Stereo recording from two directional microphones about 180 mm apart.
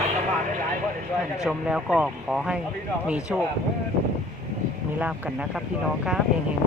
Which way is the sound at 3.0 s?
5° right (ahead or behind).